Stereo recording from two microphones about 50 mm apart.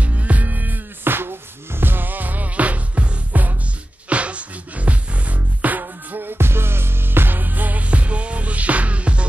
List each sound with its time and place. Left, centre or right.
0.0 s music: right